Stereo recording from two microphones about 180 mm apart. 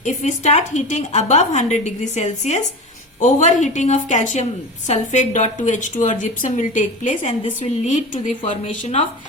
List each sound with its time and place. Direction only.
0.0 s a woman's voice: 40° left (ahead or behind)